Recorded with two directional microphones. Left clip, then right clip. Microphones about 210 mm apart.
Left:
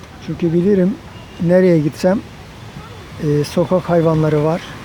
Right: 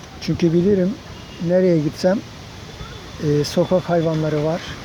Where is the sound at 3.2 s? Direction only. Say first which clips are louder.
Left 2 dB; centre (ahead or behind).